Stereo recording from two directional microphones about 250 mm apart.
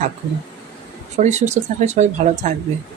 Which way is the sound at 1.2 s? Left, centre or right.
Right.